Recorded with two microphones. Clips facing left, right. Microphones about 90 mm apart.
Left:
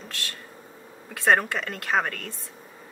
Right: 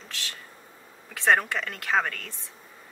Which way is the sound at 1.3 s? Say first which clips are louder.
Left 1 dB; 10° left (ahead or behind).